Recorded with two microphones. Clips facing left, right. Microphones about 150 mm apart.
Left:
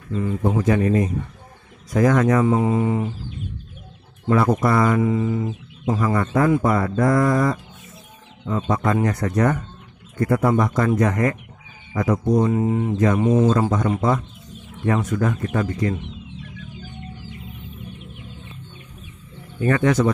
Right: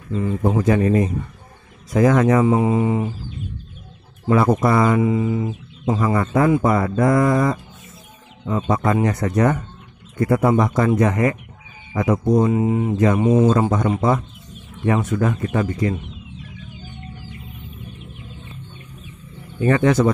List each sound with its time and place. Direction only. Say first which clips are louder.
0.4 s speech: right 2 dB; 35° right (ahead or behind); by 3.1 s 15° right (ahead or behind)
4.3 s speech: right 2 dB; 25° right (ahead or behind)
8.6 s speech: right 2 dB; 20° right (ahead or behind)
19.6 s speech: right 2 dB; 25° right (ahead or behind)